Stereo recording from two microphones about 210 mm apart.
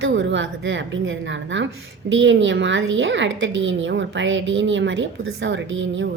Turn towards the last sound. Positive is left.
turn(degrees=-60)  # may be behind; listen again after turning